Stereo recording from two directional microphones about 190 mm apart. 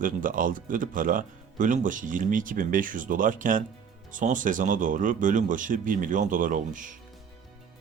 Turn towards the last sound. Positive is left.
turn(degrees=-45)  # may be behind; listen again after turning